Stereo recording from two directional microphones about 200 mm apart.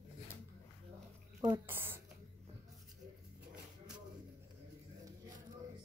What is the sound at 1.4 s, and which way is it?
Speech, 15° right (ahead or behind).